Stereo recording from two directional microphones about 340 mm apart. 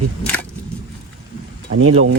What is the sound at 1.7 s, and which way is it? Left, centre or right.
Speech, right.